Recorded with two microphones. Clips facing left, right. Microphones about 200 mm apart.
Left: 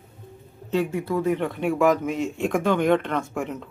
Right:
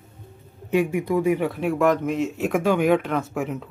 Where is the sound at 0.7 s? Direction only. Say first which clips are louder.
Right 3 dB; 15° right (ahead or behind).